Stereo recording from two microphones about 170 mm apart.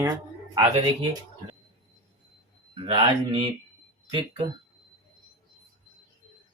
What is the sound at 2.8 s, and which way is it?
Speech, 30° right (ahead or behind).